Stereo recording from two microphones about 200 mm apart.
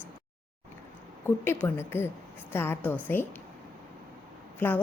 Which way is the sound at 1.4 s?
10° left (ahead or behind).